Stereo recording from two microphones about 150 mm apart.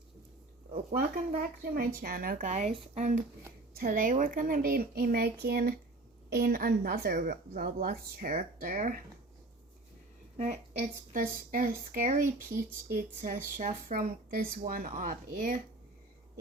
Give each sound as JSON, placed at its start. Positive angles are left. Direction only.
{"t": 0.9, "sound": "speech", "side_deg": -60}
{"t": 3.8, "sound": "a woman's voice", "side_deg": -70}
{"t": 10.3, "sound": "a woman's voice", "side_deg": -50}
{"t": 11.1, "sound": "a woman's voice", "side_deg": -65}